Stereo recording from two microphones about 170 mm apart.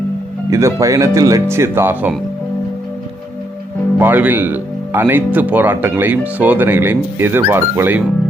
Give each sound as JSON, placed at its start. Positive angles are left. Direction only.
{"t": 0.5, "sound": "speech", "side_deg": -20}
{"t": 3.9, "sound": "speech", "side_deg": -10}